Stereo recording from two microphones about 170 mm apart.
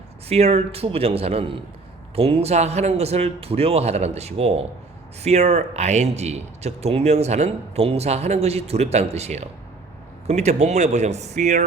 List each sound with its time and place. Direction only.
0.3 s speech: 40° right (ahead or behind)